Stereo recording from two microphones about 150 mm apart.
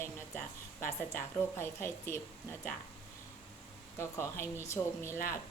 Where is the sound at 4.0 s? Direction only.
15° left (ahead or behind).